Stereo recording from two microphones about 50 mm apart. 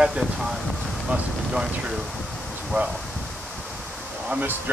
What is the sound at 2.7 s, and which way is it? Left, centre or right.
Speech, right.